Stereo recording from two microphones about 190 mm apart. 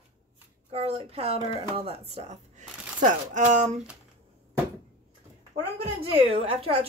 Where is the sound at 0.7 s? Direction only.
30° right (ahead or behind).